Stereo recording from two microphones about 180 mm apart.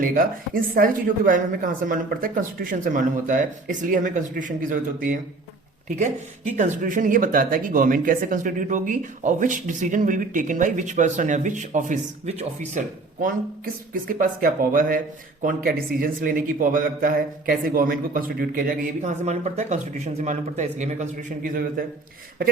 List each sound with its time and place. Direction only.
0.0 s speech: 50° right (ahead or behind)
13.9 s speech: 50° right (ahead or behind)
19.0 s speech: 40° right (ahead or behind)